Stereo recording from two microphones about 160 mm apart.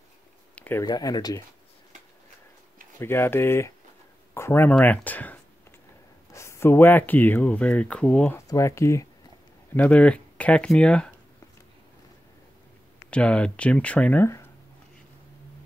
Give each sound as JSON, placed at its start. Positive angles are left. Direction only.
{"t": 0.6, "sound": "a sound", "side_deg": 10}
{"t": 0.8, "sound": "speech", "side_deg": 25}
{"t": 3.0, "sound": "speech", "side_deg": 15}
{"t": 8.5, "sound": "speech", "side_deg": 20}
{"t": 13.1, "sound": "speech", "side_deg": 5}